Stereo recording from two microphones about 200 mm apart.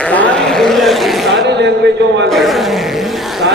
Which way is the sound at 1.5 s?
60° right (ahead or behind).